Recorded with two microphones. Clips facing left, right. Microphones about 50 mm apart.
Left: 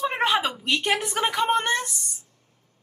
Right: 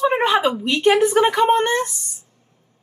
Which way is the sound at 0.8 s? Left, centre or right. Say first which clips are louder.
Right 12 dB; right.